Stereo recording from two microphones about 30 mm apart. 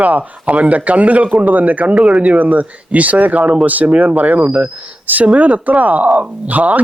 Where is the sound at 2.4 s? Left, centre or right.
Right.